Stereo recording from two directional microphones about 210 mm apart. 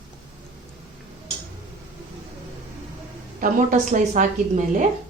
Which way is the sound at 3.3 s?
40° right (ahead or behind).